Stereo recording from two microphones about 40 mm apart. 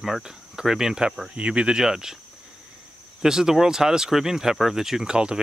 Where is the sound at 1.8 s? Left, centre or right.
Centre.